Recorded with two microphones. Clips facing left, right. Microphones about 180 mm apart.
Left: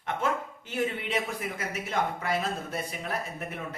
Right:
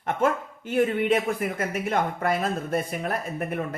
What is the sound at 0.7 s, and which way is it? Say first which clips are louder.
Speech: right 8 dB; 50° right (ahead or behind).